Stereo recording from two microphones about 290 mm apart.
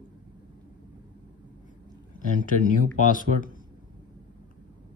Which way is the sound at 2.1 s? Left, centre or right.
Left.